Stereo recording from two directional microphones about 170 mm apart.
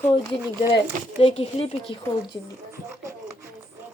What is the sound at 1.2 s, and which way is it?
Speech, 35° left (ahead or behind).